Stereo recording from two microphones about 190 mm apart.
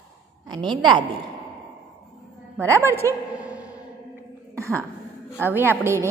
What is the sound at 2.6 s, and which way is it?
A woman's voice, 15° right (ahead or behind).